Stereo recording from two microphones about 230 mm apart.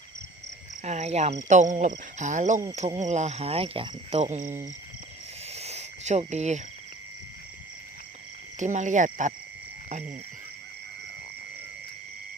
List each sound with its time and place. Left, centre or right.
0.8 s cricket: right
1.5 s speech: right
3.0 s cricket: right
8.5 s speech: right